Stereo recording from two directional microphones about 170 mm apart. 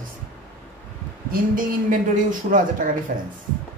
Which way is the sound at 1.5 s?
55° right (ahead or behind).